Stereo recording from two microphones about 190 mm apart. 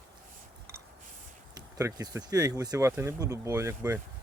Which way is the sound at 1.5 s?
20° right (ahead or behind).